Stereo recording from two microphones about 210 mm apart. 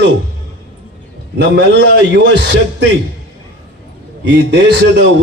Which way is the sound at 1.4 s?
55° right (ahead or behind).